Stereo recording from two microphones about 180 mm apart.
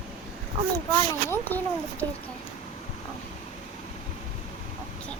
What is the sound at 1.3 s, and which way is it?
Speech, 10° left (ahead or behind).